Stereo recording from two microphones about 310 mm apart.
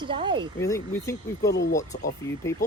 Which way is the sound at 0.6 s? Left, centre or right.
Centre.